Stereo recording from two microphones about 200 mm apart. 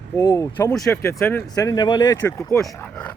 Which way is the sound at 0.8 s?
5° left (ahead or behind).